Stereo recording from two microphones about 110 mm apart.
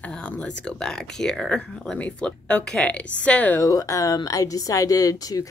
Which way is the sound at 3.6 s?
30° left (ahead or behind).